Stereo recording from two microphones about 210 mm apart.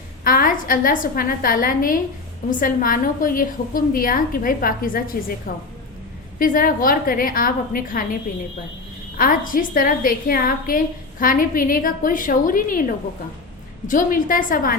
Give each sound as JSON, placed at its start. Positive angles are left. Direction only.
{"t": 0.3, "sound": "a woman's voice", "side_deg": 40}
{"t": 9.1, "sound": "a woman's voice", "side_deg": 40}
{"t": 13.8, "sound": "a woman's voice", "side_deg": 40}